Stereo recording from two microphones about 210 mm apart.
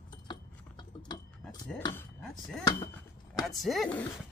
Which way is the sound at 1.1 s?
20° left (ahead or behind).